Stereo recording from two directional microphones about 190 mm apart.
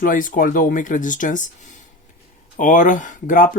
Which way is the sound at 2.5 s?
40° left (ahead or behind).